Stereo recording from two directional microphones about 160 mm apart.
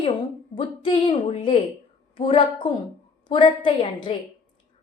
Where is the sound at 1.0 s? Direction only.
30° left (ahead or behind).